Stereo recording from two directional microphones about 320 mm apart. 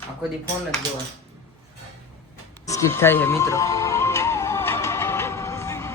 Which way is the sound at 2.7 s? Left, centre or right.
Centre.